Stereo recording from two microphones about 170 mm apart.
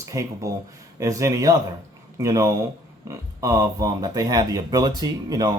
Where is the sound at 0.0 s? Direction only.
20° right (ahead or behind).